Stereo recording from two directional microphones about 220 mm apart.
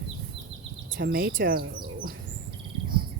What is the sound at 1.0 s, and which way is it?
Speech, 40° right (ahead or behind).